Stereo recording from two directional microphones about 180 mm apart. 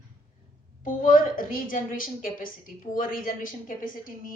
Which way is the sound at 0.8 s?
50° left (ahead or behind).